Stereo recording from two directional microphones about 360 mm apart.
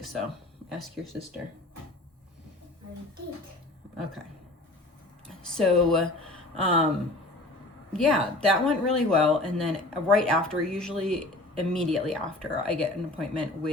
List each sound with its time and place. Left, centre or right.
0.7 s speech: centre
5.2 s speech: centre
7.9 s speech: centre